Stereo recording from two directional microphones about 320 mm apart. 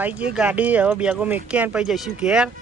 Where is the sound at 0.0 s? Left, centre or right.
Centre.